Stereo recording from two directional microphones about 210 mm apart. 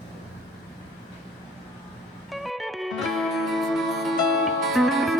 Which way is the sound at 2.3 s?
Centre (ahead or behind).